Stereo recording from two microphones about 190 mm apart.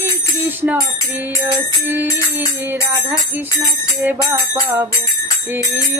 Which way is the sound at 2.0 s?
20° left (ahead or behind).